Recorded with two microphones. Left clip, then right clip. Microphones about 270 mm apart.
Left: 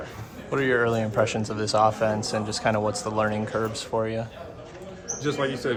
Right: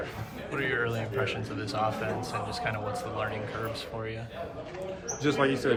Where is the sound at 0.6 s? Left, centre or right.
Centre.